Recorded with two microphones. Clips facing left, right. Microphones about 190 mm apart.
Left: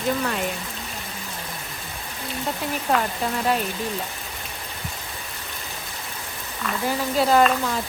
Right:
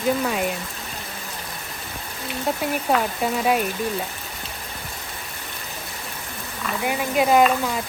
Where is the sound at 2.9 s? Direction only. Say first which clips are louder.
Right 1 dB; 5° right (ahead or behind).